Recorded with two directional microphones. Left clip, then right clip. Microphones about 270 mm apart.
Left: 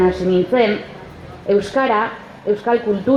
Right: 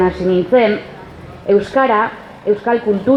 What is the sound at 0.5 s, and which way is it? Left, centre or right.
A woman's voice, right.